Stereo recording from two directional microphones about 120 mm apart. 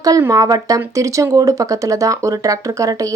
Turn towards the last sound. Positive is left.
turn(degrees=-30)  # may be behind; listen again after turning